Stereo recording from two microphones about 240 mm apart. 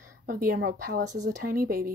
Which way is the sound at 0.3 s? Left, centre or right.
Right.